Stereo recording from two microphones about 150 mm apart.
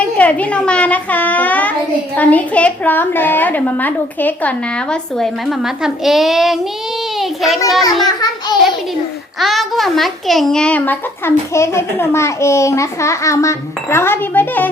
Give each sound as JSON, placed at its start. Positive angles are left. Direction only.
{"t": 0.0, "sound": "a child's voice", "side_deg": 10}
{"t": 7.2, "sound": "a sound", "side_deg": 0}
{"t": 8.0, "sound": "a child's voice", "side_deg": 25}
{"t": 9.4, "sound": "a child's voice", "side_deg": 0}